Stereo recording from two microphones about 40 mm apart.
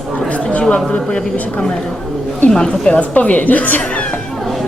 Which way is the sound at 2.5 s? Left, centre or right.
Centre.